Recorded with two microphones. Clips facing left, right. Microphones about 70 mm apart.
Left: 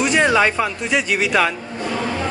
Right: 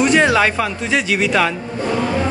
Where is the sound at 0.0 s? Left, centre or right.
Centre.